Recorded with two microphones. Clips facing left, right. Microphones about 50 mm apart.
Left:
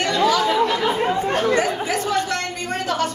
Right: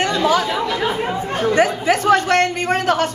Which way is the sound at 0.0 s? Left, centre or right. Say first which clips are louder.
Right 1 dB; right.